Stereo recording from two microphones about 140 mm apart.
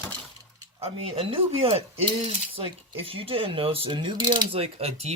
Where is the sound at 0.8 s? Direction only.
45° right (ahead or behind).